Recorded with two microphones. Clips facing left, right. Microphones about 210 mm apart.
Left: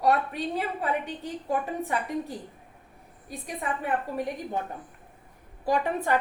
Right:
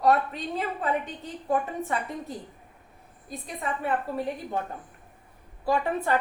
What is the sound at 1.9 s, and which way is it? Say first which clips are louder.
A woman's voice: left 2 dB; 15° left (ahead or behind).